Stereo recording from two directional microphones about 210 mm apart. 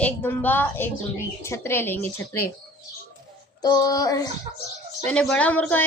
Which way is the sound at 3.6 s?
15° left (ahead or behind).